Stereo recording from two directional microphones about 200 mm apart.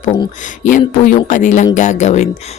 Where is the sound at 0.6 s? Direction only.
40° left (ahead or behind).